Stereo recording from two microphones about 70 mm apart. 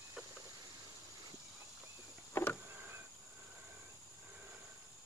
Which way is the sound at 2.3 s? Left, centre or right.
Left.